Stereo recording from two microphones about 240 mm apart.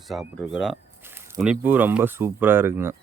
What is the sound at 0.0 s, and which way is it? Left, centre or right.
Speech, centre.